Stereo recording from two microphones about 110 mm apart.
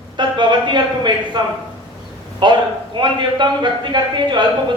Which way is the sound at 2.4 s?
45° right (ahead or behind).